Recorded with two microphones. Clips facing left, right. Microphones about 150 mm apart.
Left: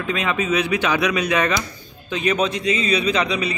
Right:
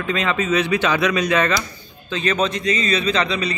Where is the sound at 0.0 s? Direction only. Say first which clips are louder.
Right 1 dB; 10° left (ahead or behind).